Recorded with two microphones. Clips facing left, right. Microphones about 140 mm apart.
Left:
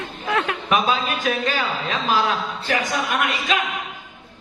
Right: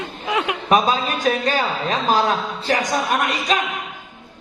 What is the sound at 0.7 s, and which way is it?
A man's voice, 40° right (ahead or behind).